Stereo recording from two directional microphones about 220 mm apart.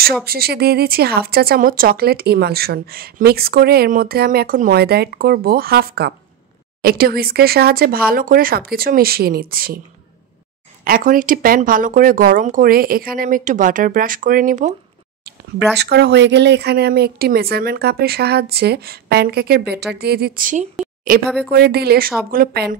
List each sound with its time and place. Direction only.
0.2 s speech: 45° right (ahead or behind)
10.8 s speech: 40° right (ahead or behind)
15.8 s speech: 50° right (ahead or behind)
20.8 s a sound: 40° right (ahead or behind)
21.5 s speech: 45° right (ahead or behind)